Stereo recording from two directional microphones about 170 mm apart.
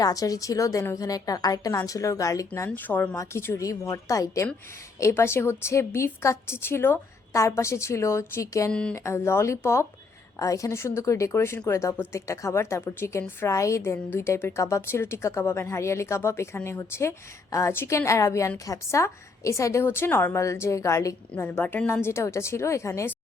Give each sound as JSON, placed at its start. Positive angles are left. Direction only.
{"t": 0.0, "sound": "a woman's voice", "side_deg": 20}
{"t": 8.7, "sound": "speech", "side_deg": 5}